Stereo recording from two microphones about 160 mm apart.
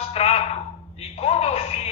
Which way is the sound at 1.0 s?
40° left (ahead or behind).